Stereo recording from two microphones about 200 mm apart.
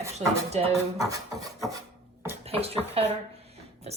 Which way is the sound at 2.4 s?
30° right (ahead or behind).